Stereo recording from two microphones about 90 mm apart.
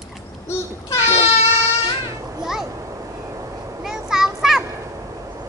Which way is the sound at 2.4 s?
5° right (ahead or behind).